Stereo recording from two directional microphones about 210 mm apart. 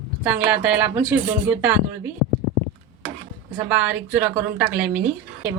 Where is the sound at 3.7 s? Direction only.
5° right (ahead or behind).